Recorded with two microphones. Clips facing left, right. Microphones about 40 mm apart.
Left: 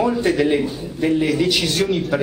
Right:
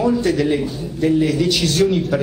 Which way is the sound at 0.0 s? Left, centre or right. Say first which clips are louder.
Even; centre.